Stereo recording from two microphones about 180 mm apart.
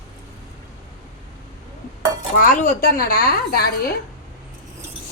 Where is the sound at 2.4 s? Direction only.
50° left (ahead or behind).